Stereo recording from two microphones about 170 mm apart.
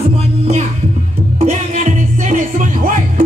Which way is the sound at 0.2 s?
40° right (ahead or behind).